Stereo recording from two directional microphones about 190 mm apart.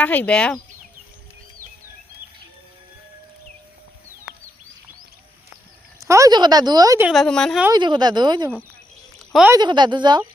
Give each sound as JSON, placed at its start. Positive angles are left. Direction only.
{"t": 0.0, "sound": "speech", "side_deg": 10}
{"t": 6.0, "sound": "speech", "side_deg": -15}
{"t": 7.1, "sound": "speech", "side_deg": 5}
{"t": 7.7, "sound": "speech", "side_deg": -25}
{"t": 9.1, "sound": "a sound", "side_deg": 0}
{"t": 9.5, "sound": "speech", "side_deg": -20}